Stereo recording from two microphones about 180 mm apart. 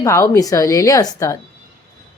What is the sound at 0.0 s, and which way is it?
A woman's voice, 15° left (ahead or behind).